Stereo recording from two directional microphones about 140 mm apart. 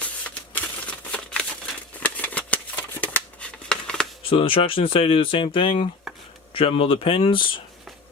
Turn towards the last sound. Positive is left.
turn(degrees=35)  # may be behind; listen again after turning